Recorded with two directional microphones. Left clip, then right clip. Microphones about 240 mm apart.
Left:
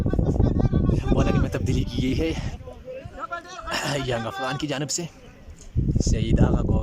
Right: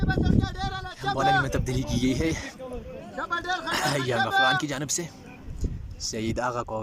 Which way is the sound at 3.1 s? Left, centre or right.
Right.